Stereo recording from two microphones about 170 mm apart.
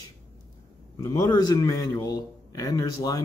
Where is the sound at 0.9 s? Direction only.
20° left (ahead or behind).